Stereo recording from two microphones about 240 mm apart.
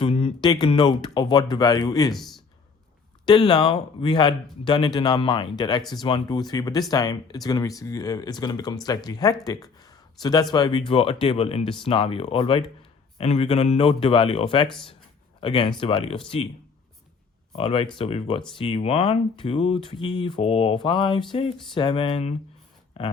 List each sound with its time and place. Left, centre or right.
0.0 s speech: left
3.2 s speech: centre
17.6 s speech: left